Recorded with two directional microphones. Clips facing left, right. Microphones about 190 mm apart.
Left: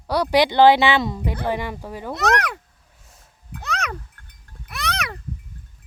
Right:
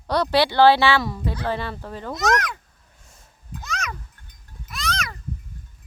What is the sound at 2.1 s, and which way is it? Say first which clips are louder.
Speech: left 1 dB; 65° left (ahead or behind).